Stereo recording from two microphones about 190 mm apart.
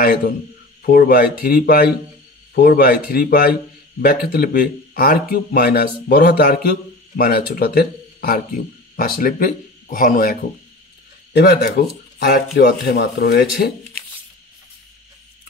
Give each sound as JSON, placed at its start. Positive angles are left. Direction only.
{"t": 0.0, "sound": "speech", "side_deg": 55}
{"t": 11.3, "sound": "speech", "side_deg": 60}